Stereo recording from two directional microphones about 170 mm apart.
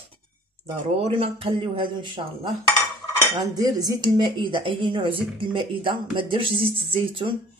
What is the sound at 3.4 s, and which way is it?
Speech, 20° right (ahead or behind).